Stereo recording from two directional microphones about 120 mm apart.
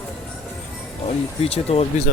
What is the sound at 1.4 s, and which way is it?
Speech, 60° left (ahead or behind).